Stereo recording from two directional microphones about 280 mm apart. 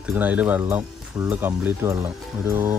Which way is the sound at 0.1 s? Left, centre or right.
Centre.